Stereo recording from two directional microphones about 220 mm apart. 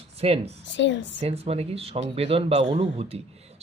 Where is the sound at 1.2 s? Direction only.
30° right (ahead or behind).